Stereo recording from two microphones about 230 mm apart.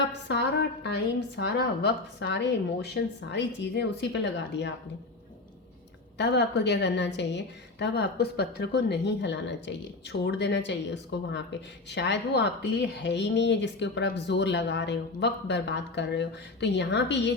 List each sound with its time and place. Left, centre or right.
0.1 s speech: left
6.1 s speech: left